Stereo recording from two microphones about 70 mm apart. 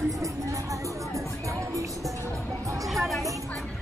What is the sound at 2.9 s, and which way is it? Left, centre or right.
Music, centre.